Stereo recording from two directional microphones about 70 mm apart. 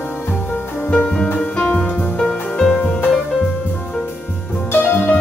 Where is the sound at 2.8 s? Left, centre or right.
Left.